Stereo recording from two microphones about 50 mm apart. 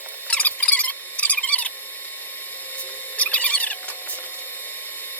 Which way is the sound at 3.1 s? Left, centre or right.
Left.